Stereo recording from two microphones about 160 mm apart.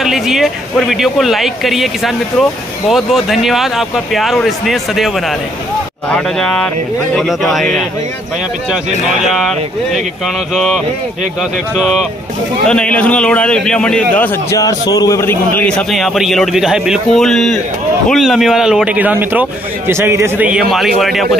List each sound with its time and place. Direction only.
0.0 s speech: centre (ahead or behind)
11.8 s a man's voice: 5° right (ahead or behind)